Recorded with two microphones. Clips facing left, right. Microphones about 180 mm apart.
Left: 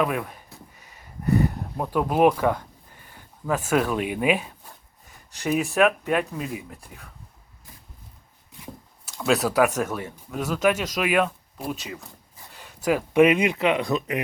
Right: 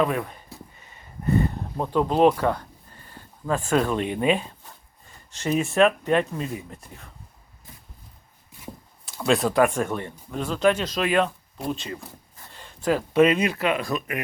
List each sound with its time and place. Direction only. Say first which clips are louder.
0.0 s speech: right 1 dB; 5° left (ahead or behind)
0.8 s a sound: even; centre (ahead or behind)
5.5 s speech: right 1 dB; centre (ahead or behind)
9.2 s speech: right 1 dB; 5° left (ahead or behind); by 14.2 s 20° left (ahead or behind)